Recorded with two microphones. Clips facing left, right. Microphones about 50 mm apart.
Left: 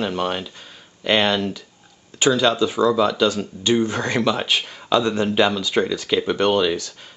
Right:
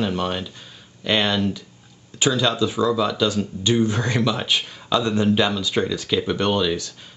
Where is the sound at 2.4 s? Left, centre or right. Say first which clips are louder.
Left 2 dB; left.